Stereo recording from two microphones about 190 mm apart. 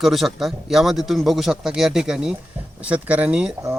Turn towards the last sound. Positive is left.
turn(degrees=-5)  # may be behind; listen again after turning